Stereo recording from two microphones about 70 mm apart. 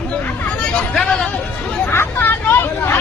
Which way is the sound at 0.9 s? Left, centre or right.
Centre.